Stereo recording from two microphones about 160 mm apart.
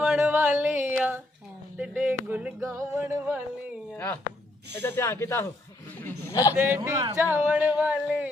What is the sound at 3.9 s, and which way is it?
Speech, 10° left (ahead or behind).